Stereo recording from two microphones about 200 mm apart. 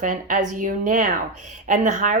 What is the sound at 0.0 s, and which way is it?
Speech, 40° right (ahead or behind).